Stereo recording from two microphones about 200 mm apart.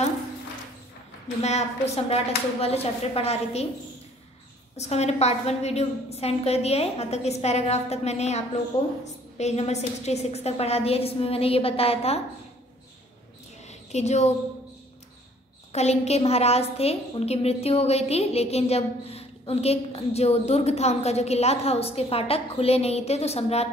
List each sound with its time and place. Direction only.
1.4 s a woman's voice: 35° left (ahead or behind)
4.7 s a woman's voice: 35° left (ahead or behind)
13.7 s a sound: 35° left (ahead or behind)
15.7 s a woman's voice: 35° left (ahead or behind)